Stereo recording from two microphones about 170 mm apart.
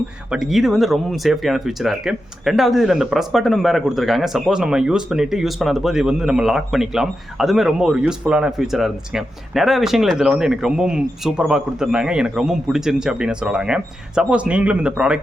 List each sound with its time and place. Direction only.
0.3 s speech: centre (ahead or behind)